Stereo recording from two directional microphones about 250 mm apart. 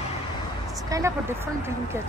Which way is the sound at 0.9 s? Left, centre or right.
Centre.